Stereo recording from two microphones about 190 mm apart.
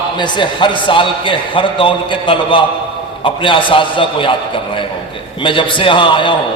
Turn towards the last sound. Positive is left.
turn(degrees=25)  # may be behind; listen again after turning